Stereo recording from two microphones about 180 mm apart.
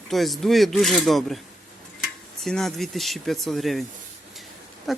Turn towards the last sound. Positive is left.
turn(degrees=0)  # may be behind; listen again after turning